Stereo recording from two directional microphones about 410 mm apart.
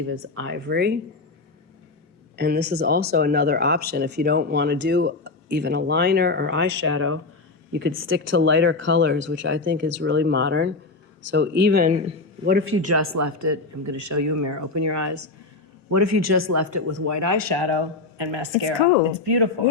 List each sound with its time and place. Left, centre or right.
0.1 s speech: right
2.3 s speech: right
19.2 s speech: right